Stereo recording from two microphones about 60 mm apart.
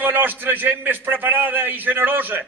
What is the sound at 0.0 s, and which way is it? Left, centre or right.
A man's voice, right.